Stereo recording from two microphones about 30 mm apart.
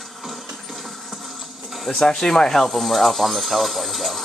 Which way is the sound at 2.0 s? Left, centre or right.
Left.